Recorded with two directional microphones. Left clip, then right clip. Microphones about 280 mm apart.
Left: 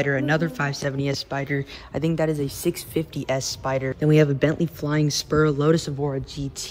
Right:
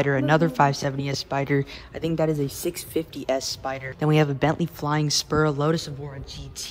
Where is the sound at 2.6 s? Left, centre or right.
Centre.